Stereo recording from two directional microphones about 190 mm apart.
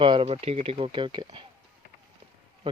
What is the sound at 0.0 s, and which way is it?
Speech, 25° right (ahead or behind).